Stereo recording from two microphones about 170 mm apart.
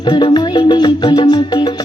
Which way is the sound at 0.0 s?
25° left (ahead or behind).